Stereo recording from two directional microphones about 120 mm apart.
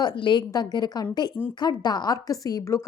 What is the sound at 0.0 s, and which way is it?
A woman's voice, 40° left (ahead or behind).